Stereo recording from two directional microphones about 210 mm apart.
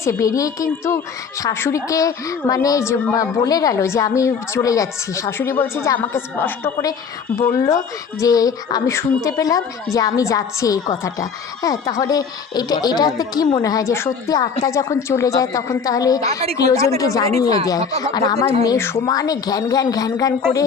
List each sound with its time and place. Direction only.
0.0 s a woman's voice: 15° left (ahead or behind)